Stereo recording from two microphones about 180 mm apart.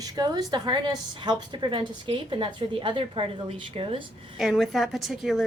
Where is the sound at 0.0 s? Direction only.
20° right (ahead or behind).